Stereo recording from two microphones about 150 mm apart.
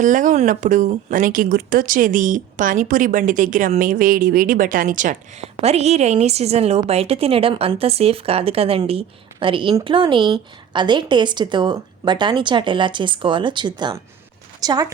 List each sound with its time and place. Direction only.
0.0 s speech: 60° right (ahead or behind)
5.4 s a woman's voice: 45° right (ahead or behind); by 14.9 s 25° right (ahead or behind)